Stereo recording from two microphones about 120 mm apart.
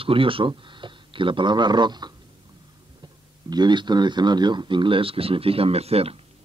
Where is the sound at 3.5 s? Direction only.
40° right (ahead or behind); by 6.2 s 55° right (ahead or behind).